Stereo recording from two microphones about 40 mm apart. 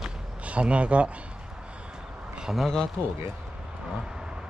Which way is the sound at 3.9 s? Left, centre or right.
Centre.